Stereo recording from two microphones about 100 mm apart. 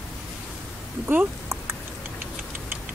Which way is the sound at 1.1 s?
20° right (ahead or behind).